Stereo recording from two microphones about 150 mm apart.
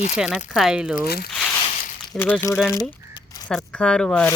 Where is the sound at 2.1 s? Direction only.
15° left (ahead or behind).